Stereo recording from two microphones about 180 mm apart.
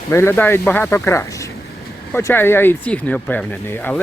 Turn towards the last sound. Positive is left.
turn(degrees=10)  # may be behind; listen again after turning